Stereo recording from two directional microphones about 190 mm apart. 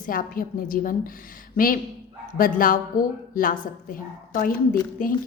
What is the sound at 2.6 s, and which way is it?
A woman's voice, 45° left (ahead or behind).